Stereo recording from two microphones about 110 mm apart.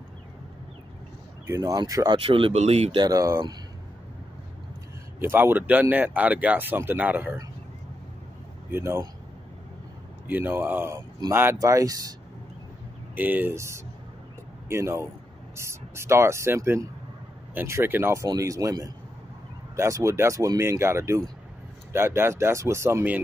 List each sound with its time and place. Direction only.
1.5 s speech: 30° right (ahead or behind)
2.1 s speech: 55° right (ahead or behind)
2.5 s speech: 70° right (ahead or behind)
3.0 s speech: 30° right (ahead or behind)
5.2 s speech: 20° right (ahead or behind)
8.7 s speech: 25° right (ahead or behind)
10.2 s speech: 15° right (ahead or behind)
11.5 s speech: 30° right (ahead or behind)
13.1 s speech: 15° right (ahead or behind)
18.2 s speech: 30° right (ahead or behind)